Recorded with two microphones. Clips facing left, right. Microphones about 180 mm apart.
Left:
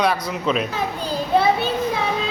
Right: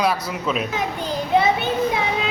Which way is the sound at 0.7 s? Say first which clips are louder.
Even; 20° right (ahead or behind).